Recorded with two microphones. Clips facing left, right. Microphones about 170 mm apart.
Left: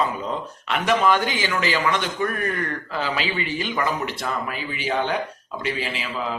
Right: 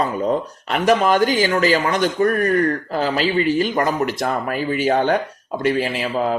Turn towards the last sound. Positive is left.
turn(degrees=-45)  # may be behind; listen again after turning